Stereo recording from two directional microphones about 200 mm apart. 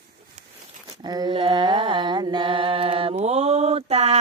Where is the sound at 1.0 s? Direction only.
20° right (ahead or behind).